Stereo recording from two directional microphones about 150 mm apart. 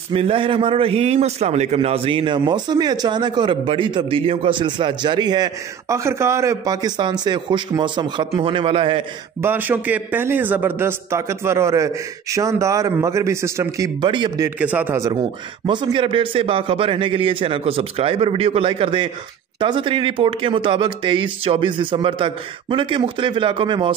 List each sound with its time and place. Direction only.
0.1 s a man's voice: 35° right (ahead or behind)
9.4 s a man's voice: 15° right (ahead or behind)
14.0 s a man's voice: 30° right (ahead or behind)
14.6 s a man's voice: 10° right (ahead or behind)
15.6 s a man's voice: 30° right (ahead or behind)